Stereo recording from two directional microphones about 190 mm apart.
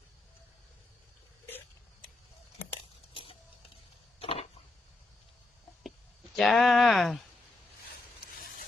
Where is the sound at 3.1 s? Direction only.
30° left (ahead or behind).